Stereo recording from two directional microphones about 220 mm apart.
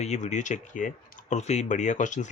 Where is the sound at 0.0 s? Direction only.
30° left (ahead or behind).